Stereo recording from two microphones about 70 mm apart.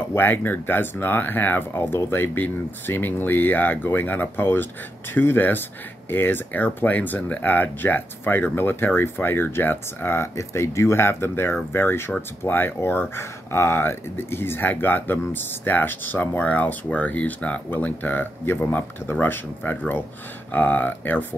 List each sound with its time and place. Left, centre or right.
0.1 s speech: left